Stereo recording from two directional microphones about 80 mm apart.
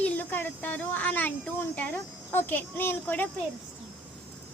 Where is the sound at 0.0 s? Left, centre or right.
Left.